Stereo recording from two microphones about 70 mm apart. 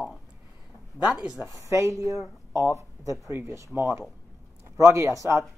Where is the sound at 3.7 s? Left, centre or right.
Right.